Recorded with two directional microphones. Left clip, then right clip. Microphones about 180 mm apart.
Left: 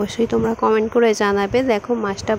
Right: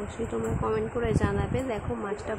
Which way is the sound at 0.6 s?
50° left (ahead or behind).